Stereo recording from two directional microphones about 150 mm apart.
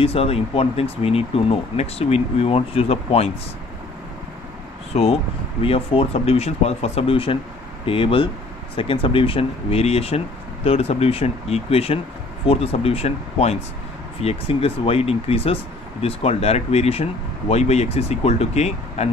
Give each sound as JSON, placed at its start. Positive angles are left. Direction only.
{"t": 0.0, "sound": "speech", "side_deg": 40}
{"t": 4.9, "sound": "speech", "side_deg": 45}